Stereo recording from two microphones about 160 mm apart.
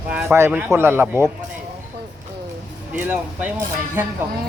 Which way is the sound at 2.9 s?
10° right (ahead or behind).